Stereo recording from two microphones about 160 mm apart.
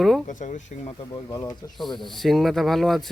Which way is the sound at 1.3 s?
25° left (ahead or behind).